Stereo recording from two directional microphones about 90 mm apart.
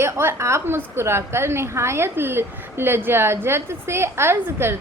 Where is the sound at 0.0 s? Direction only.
25° right (ahead or behind).